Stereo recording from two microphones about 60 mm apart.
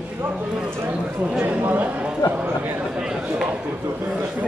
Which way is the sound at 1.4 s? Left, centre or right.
Right.